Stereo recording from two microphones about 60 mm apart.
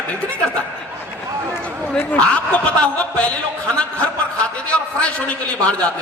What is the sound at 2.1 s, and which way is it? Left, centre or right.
A man's voice, left.